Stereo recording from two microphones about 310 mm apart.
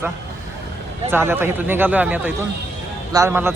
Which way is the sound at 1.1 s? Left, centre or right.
Centre.